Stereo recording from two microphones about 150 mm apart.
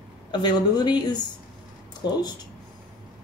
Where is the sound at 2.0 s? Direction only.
90° left.